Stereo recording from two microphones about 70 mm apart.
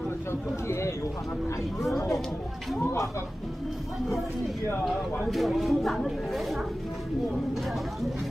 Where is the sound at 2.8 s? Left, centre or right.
Left.